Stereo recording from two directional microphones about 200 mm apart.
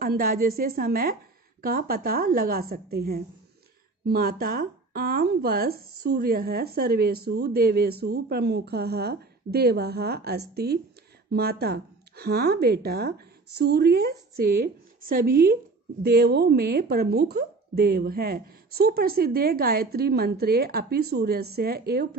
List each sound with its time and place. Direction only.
0.0 s speech: 45° right (ahead or behind)